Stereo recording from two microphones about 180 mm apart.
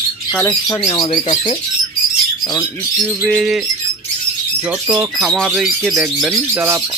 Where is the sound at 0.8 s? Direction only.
30° left (ahead or behind).